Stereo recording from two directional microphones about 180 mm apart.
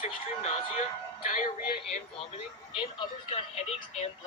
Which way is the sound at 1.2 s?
50° left (ahead or behind).